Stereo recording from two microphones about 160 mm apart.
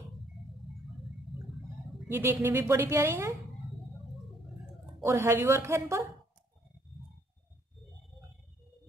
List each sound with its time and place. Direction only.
2.0 s a woman's voice: 15° right (ahead or behind)
5.0 s a woman's voice: 15° right (ahead or behind)